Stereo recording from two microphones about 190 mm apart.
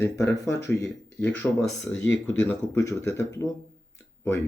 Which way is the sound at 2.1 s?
75° left (ahead or behind).